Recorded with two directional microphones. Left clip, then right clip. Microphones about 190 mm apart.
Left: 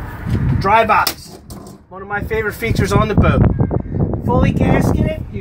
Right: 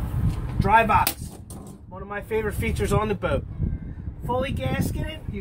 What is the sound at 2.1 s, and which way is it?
Speech, 40° left (ahead or behind).